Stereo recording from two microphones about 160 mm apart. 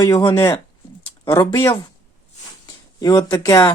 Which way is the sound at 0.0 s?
25° left (ahead or behind).